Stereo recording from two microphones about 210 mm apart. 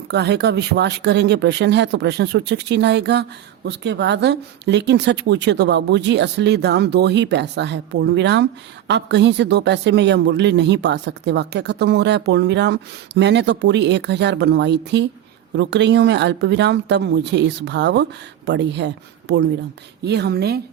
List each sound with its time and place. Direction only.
0.1 s a woman's voice: 50° right (ahead or behind)